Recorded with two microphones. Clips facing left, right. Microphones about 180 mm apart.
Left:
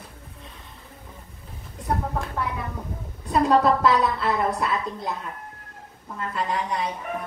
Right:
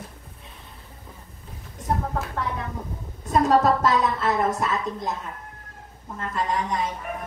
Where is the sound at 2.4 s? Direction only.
5° left (ahead or behind).